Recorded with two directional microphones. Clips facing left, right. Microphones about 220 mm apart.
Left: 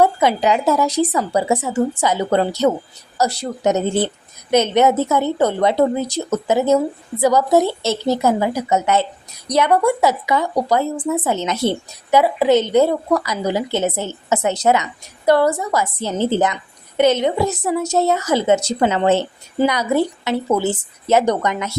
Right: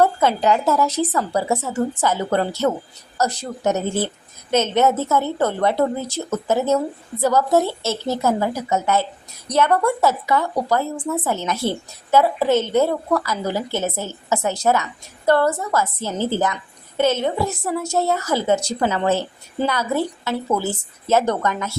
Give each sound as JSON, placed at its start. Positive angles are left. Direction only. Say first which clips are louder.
{"t": 0.0, "sound": "a woman's voice", "louder": "left 2 dB", "side_deg": 15}